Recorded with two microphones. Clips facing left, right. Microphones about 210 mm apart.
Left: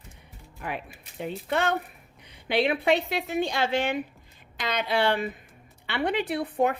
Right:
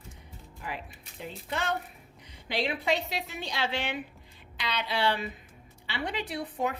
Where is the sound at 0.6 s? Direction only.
60° left (ahead or behind).